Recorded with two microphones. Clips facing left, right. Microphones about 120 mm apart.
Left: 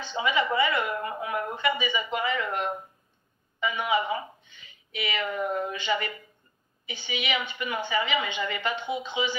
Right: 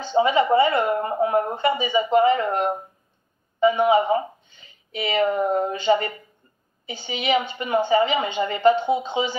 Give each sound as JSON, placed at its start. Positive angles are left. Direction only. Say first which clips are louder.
{"t": 0.0, "sound": "a woman's voice", "louder": "right 8 dB", "side_deg": -35}